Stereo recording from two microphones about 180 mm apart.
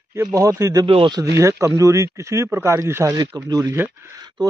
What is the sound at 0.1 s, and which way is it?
Speech, 15° right (ahead or behind).